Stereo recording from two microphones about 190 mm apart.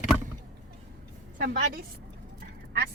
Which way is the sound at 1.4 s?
50° right (ahead or behind).